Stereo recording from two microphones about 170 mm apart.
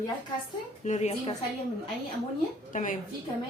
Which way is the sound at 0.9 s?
40° left (ahead or behind).